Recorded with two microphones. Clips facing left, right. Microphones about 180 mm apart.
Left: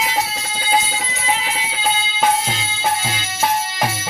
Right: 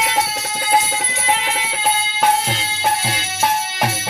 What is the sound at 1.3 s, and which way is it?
Music, 65° right (ahead or behind).